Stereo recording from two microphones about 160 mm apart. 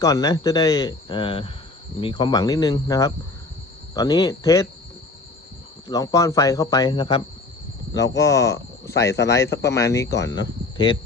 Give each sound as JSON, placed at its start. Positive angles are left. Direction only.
{"t": 0.0, "sound": "speech", "side_deg": 20}
{"t": 5.9, "sound": "speech", "side_deg": 20}
{"t": 8.0, "sound": "speech", "side_deg": 20}